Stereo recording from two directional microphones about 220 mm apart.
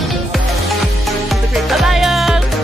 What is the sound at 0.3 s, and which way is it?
Music, centre (ahead or behind).